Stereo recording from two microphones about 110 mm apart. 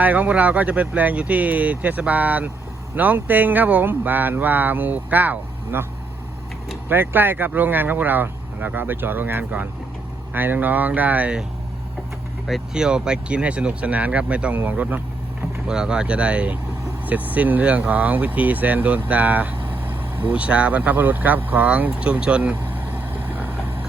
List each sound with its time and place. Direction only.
0.0 s speech: 15° right (ahead or behind)
6.8 s speech: 20° right (ahead or behind)
12.5 s speech: 5° right (ahead or behind)